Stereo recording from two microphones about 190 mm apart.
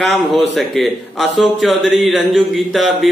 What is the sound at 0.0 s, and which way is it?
Speech, centre (ahead or behind).